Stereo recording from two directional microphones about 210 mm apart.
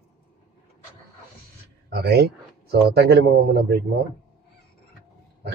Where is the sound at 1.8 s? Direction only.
50° right (ahead or behind).